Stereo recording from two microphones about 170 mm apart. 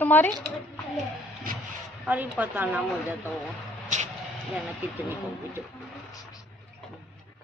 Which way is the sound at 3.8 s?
45° right (ahead or behind).